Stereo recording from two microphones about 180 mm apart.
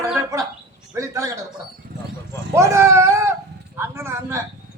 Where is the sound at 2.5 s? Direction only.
15° right (ahead or behind).